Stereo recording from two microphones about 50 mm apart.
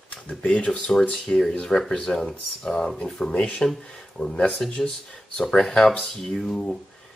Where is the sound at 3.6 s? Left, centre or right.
Left.